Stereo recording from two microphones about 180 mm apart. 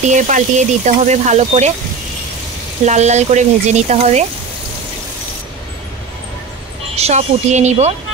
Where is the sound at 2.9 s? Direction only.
40° right (ahead or behind).